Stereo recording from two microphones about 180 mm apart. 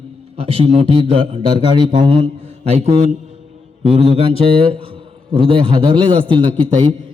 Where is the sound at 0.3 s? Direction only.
30° right (ahead or behind).